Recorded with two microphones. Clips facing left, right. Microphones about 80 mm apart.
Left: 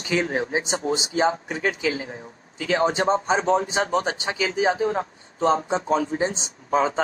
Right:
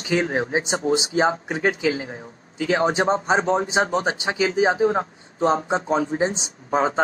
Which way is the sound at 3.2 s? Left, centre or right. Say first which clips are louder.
Right 1 dB; right.